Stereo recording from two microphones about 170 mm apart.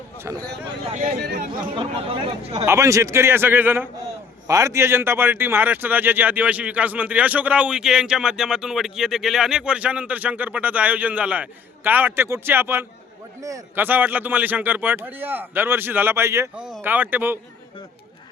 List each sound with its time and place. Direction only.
0.2 s a man's voice: 20° right (ahead or behind)
0.9 s speech: 50° right (ahead or behind)
1.2 s speech: 65° right (ahead or behind)
1.7 s speech: 30° right (ahead or behind)
2.6 s a man's voice: 20° right (ahead or behind)
16.6 s a man's voice: 5° right (ahead or behind)